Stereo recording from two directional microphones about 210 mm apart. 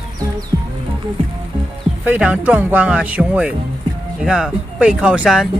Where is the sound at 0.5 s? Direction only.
15° right (ahead or behind).